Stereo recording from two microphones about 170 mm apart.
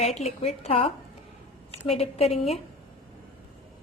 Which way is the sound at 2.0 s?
35° left (ahead or behind).